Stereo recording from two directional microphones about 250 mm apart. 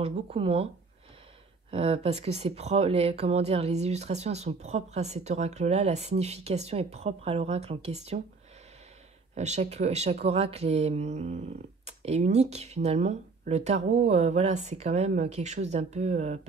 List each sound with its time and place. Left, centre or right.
0.0 s speech: right
1.7 s speech: right
9.3 s speech: right